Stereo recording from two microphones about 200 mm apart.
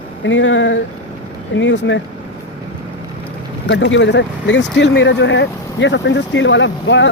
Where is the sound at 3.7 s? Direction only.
60° left (ahead or behind).